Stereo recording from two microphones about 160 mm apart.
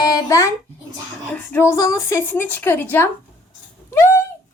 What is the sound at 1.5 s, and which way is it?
Speech, 15° left (ahead or behind).